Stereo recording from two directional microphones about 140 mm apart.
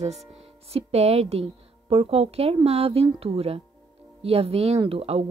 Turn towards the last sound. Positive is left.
turn(degrees=-45)  # may be behind; listen again after turning